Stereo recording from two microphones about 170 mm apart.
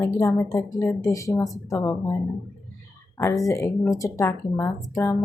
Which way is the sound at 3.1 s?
20° left (ahead or behind).